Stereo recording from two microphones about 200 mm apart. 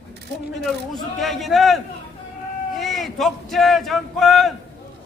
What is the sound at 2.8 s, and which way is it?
A man's voice, centre (ahead or behind).